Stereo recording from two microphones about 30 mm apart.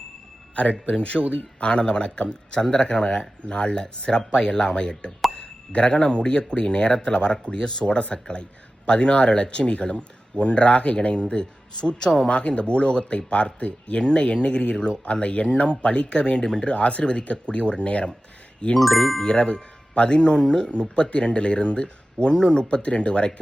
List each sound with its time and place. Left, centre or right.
0.5 s speech: left
2.3 s speech: left
3.4 s speech: left
7.9 s speech: left
12.3 s speech: left
14.0 s speech: left
16.1 s speech: left
16.7 s speech: left
18.8 s speech: centre
19.2 s speech: left
20.4 s speech: centre
20.7 s speech: left
22.8 s speech: left